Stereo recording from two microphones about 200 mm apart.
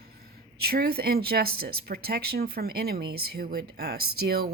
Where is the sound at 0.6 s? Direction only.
50° right (ahead or behind).